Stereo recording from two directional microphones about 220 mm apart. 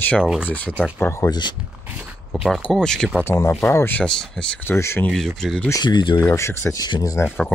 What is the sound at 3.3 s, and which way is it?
Speech, 10° left (ahead or behind).